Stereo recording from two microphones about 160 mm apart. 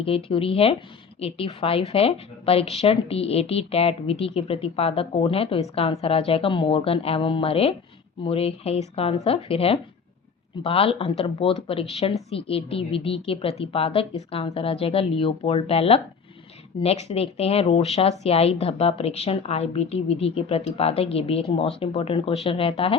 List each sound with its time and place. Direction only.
0.0 s a woman's voice: 35° left (ahead or behind)